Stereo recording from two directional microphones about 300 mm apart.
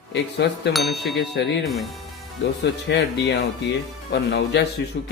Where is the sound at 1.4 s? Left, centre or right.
Left.